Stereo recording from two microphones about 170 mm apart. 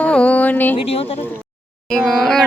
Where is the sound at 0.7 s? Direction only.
35° left (ahead or behind).